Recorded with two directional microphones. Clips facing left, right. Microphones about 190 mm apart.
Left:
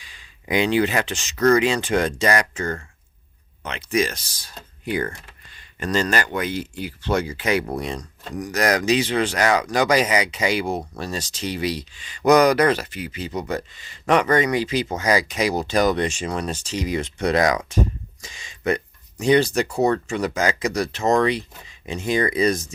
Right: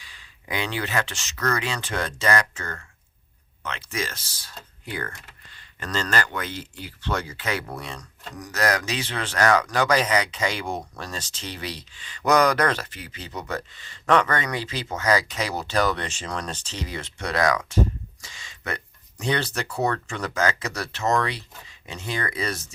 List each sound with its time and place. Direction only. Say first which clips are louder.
0.0 s speech: left 3 dB; 15° left (ahead or behind)